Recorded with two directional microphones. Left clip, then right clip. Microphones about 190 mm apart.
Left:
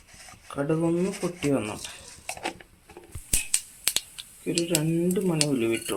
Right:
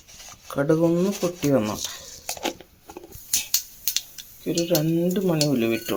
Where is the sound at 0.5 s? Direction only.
35° right (ahead or behind).